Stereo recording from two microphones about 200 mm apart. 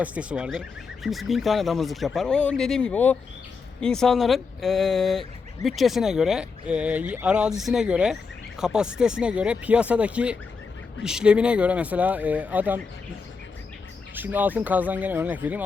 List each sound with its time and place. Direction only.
0.0 s speech: 5° right (ahead or behind)
14.2 s speech: 10° right (ahead or behind)